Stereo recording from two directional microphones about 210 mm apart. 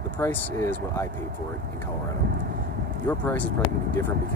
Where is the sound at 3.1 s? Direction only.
10° left (ahead or behind).